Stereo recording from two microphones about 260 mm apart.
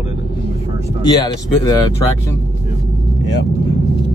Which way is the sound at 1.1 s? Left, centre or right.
Centre.